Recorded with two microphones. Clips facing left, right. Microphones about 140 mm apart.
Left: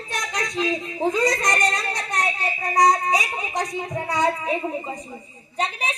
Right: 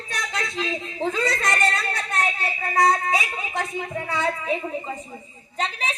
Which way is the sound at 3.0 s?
40° left (ahead or behind).